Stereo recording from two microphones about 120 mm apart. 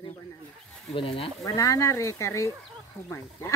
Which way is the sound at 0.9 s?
50° left (ahead or behind).